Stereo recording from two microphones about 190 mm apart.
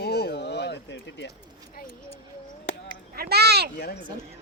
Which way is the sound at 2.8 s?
50° right (ahead or behind).